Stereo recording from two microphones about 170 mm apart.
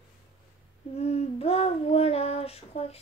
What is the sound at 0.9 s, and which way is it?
Child singing, 40° left (ahead or behind).